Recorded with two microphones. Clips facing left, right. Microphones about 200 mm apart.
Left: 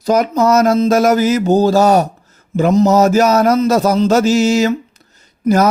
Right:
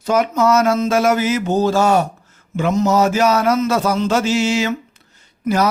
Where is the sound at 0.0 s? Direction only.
40° left (ahead or behind).